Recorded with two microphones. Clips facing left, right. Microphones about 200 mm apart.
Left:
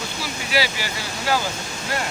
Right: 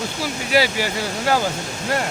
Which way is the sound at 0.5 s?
50° right (ahead or behind).